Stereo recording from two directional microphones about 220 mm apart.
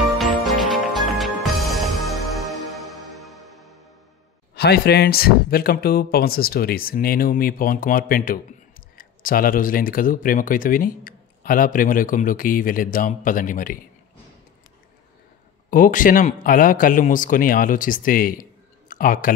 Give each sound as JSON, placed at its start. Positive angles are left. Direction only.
{"t": 0.2, "sound": "music", "side_deg": 0}
{"t": 4.6, "sound": "speech", "side_deg": 45}
{"t": 15.7, "sound": "speech", "side_deg": 40}